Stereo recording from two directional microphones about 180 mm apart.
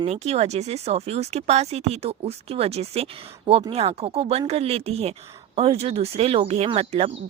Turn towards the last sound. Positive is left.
turn(degrees=-35)  # may be behind; listen again after turning